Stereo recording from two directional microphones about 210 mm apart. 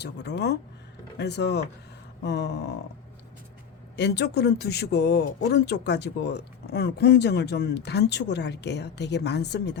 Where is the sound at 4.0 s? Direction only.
55° left (ahead or behind).